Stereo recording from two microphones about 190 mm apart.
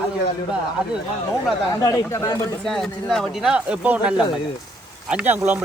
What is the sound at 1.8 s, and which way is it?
Speech, 15° left (ahead or behind).